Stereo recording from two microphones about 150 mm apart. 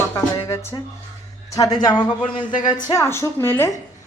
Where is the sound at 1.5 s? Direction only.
25° left (ahead or behind).